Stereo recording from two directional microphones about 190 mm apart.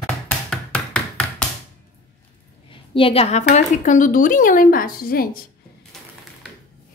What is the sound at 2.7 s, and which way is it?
Speech, 30° left (ahead or behind).